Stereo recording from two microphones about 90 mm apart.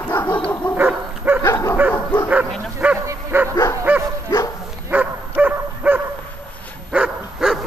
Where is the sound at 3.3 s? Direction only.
25° right (ahead or behind).